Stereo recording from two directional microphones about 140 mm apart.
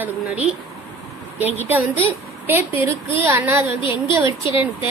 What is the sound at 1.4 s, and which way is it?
A woman's voice, 15° right (ahead or behind).